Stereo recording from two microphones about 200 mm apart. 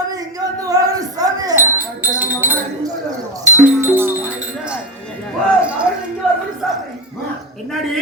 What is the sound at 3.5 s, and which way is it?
Music, 10° right (ahead or behind).